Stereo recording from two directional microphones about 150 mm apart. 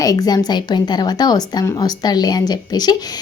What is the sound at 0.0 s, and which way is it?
A woman's voice, 25° left (ahead or behind).